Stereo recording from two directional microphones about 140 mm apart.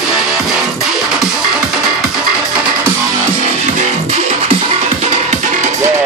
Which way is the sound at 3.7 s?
45° right (ahead or behind).